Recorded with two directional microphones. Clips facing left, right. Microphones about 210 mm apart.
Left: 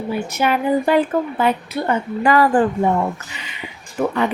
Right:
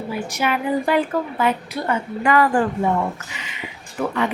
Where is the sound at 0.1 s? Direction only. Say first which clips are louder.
Left 4 dB; 30° left (ahead or behind).